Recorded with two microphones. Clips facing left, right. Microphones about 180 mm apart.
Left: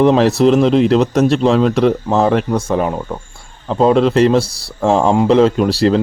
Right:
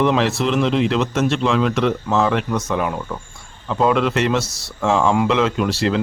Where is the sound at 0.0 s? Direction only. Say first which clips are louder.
Left 7 dB; 35° left (ahead or behind).